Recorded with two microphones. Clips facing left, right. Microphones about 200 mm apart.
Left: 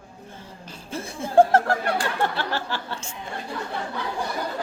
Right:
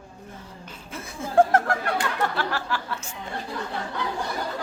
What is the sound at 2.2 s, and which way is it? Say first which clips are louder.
Speech: left 1 dB; 25° left (ahead or behind).